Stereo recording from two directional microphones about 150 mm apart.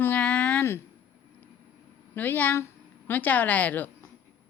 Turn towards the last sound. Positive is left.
turn(degrees=10)  # may be behind; listen again after turning